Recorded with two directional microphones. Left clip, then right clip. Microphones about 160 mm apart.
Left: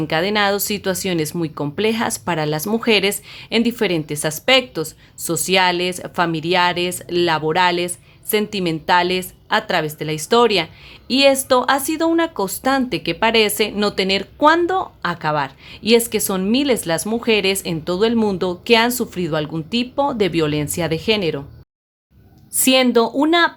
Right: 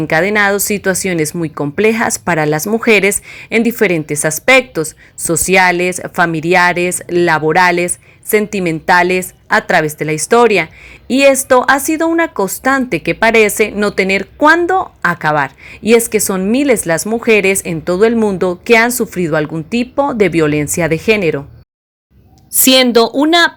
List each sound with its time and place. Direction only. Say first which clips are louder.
0.1 s a woman's voice: right 6 dB; 25° right (ahead or behind)
22.5 s a woman's voice: right 6 dB; 25° right (ahead or behind)